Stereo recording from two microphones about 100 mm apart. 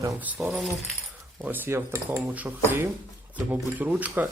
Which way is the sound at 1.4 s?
20° right (ahead or behind).